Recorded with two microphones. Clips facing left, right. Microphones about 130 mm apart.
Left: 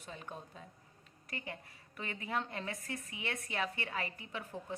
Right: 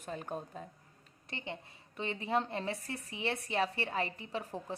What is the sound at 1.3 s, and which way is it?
Speech, 25° right (ahead or behind).